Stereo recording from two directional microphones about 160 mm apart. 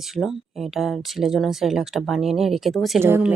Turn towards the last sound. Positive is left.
turn(degrees=-10)  # may be behind; listen again after turning